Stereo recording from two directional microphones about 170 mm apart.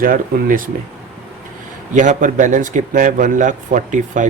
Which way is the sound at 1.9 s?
45° right (ahead or behind).